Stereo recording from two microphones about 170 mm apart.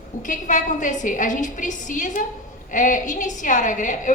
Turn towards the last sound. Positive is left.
turn(degrees=50)  # may be behind; listen again after turning